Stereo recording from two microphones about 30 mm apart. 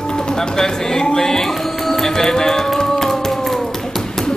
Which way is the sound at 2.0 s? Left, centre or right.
Centre.